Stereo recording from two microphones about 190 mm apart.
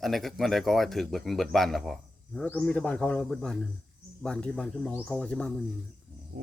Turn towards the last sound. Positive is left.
turn(degrees=5)  # may be behind; listen again after turning